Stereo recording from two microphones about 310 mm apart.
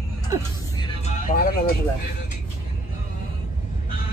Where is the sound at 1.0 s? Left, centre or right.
Left.